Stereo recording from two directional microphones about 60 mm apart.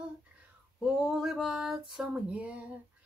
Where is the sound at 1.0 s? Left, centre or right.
Centre.